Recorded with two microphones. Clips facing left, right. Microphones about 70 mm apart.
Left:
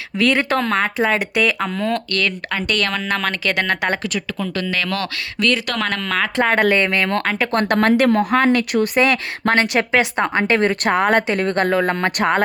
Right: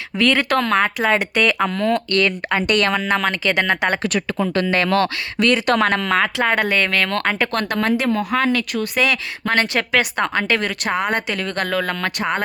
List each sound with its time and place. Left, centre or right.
0.1 s speech: centre
0.5 s speech: centre
2.5 s speech: centre
4.7 s speech: right
5.6 s speech: right
6.4 s speech: centre
6.7 s speech: centre
7.3 s speech: centre
7.7 s speech: left
9.0 s speech: left
9.6 s a woman's voice: left